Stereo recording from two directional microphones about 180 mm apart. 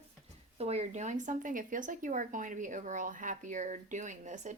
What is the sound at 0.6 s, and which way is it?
Speech, 35° right (ahead or behind).